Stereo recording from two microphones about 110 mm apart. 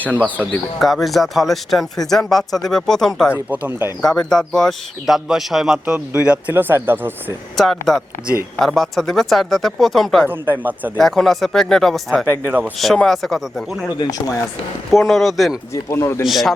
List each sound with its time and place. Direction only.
0.0 s speech: 15° left (ahead or behind)
0.8 s speech: centre (ahead or behind)
3.3 s speech: 15° right (ahead or behind)
4.0 s speech: 5° left (ahead or behind); by 7.3 s 20° right (ahead or behind)
7.5 s speech: centre (ahead or behind)
10.2 s speech: 20° right (ahead or behind)
10.9 s speech: centre (ahead or behind)
12.3 s speech: 20° right (ahead or behind)
12.8 s speech: centre (ahead or behind)
14.9 s speech: centre (ahead or behind)
15.7 s speech: 25° left (ahead or behind)
16.2 s speech: centre (ahead or behind)